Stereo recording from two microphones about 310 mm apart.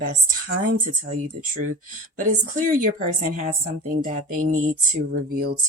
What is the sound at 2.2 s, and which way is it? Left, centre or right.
Speech, right.